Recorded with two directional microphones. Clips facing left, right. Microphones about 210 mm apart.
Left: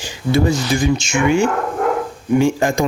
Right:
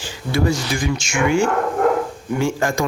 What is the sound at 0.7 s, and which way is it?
Speech, 25° left (ahead or behind).